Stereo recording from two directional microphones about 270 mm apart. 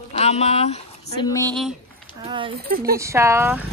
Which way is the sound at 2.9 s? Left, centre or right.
Centre.